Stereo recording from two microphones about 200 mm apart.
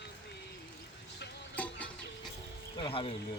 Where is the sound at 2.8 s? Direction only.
25° left (ahead or behind).